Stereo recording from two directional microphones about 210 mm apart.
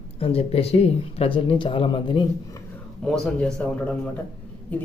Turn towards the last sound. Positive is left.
turn(degrees=5)  # may be behind; listen again after turning